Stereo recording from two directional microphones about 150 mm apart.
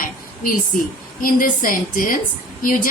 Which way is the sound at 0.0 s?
65° left (ahead or behind).